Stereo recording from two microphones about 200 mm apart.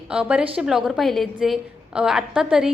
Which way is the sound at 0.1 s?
5° right (ahead or behind).